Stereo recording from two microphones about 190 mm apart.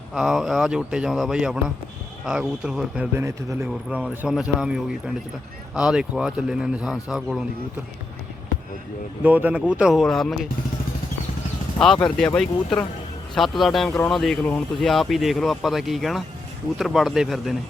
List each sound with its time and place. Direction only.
0.1 s speech: centre (ahead or behind)
9.2 s speech: 10° right (ahead or behind)
11.9 s speech: 5° left (ahead or behind)